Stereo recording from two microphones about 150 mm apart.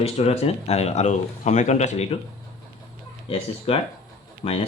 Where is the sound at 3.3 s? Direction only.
40° left (ahead or behind).